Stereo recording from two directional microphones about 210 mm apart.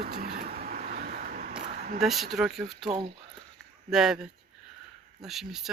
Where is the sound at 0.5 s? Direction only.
45° right (ahead or behind).